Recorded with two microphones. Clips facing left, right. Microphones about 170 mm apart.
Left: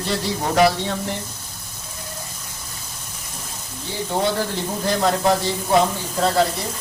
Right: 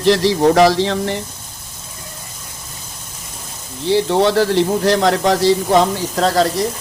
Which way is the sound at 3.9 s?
90° right.